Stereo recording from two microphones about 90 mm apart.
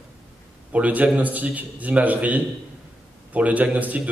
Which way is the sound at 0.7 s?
15° right (ahead or behind).